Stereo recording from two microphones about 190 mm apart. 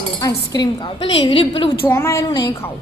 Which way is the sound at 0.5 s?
25° left (ahead or behind).